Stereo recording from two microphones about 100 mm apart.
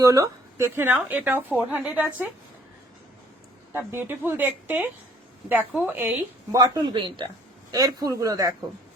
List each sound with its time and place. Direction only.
0.0 s speech: 35° right (ahead or behind)
0.8 s a woman's voice: 20° right (ahead or behind)
3.7 s a woman's voice: 25° right (ahead or behind)
6.5 s speech: 40° right (ahead or behind)
7.7 s speech: 35° right (ahead or behind)